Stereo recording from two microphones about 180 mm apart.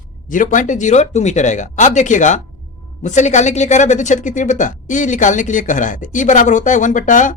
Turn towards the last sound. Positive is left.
turn(degrees=45)  # may be behind; listen again after turning